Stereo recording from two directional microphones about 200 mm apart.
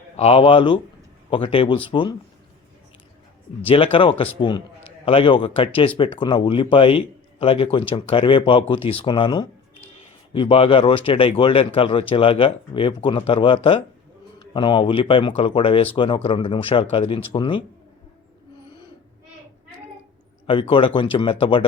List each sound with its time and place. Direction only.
0.2 s a man's voice: 30° left (ahead or behind)
3.9 s a man's voice: 25° left (ahead or behind)
20.5 s a man's voice: 25° left (ahead or behind)